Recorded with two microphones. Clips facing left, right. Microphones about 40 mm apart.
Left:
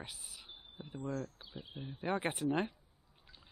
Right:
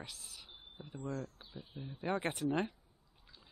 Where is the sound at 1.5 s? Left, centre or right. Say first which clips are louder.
Left 1 dB; left.